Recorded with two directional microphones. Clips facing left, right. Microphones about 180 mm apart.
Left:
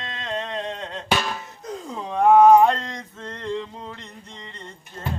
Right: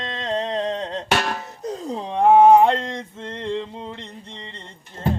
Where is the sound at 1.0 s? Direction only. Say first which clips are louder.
Right 1 dB; 70° right (ahead or behind).